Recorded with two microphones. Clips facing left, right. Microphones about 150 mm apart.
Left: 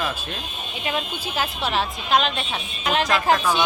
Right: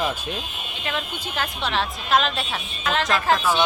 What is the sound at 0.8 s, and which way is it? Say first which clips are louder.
A woman's voice: left 2 dB; 10° left (ahead or behind).